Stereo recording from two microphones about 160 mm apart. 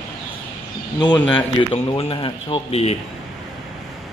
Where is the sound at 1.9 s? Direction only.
35° left (ahead or behind).